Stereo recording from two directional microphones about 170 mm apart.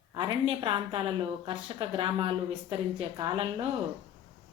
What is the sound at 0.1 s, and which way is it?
A woman's voice, 30° right (ahead or behind).